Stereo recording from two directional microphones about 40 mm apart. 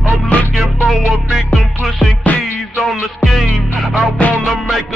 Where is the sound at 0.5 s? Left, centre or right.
Centre.